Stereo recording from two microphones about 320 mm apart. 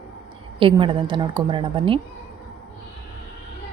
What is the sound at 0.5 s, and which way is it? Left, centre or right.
A woman's voice, centre.